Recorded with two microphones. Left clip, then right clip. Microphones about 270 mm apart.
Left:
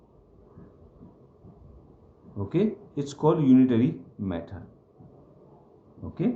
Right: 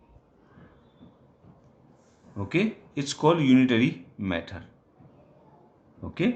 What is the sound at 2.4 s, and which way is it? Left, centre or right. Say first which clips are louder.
Speech: even; right.